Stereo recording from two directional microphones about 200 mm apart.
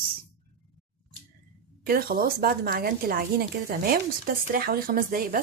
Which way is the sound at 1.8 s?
50° right (ahead or behind).